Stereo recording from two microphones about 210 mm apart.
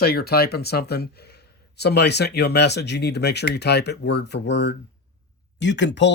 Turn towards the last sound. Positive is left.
turn(degrees=55)  # may be behind; listen again after turning